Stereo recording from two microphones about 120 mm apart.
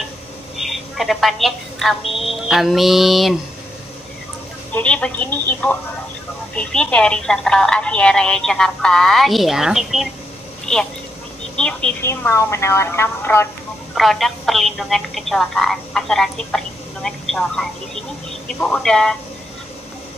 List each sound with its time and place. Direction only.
0.6 s a woman's voice: centre (ahead or behind)
4.7 s a woman's voice: 10° left (ahead or behind)
12.0 s a woman's voice: 20° left (ahead or behind)
13.9 s a woman's voice: centre (ahead or behind)